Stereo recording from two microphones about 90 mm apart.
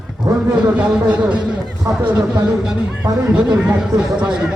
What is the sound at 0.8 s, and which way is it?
Speech, 10° right (ahead or behind).